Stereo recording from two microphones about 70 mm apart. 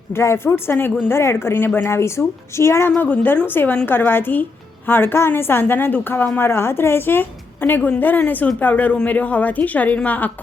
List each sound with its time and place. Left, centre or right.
0.1 s a woman's voice: left
1.9 s a woman's voice: left